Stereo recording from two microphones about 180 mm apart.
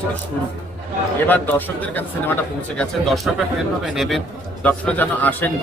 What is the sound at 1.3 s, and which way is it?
A man's voice, 10° left (ahead or behind).